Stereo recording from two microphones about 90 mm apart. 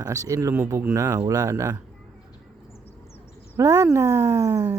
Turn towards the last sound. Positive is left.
turn(degrees=-35)  # may be behind; listen again after turning